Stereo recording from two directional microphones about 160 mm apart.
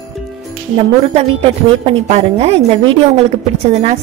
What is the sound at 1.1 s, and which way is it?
A woman's voice, 40° right (ahead or behind).